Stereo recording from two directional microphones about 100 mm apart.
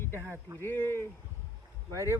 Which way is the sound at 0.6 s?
20° left (ahead or behind).